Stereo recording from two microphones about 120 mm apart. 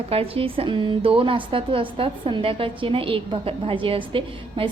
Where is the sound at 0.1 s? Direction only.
50° right (ahead or behind).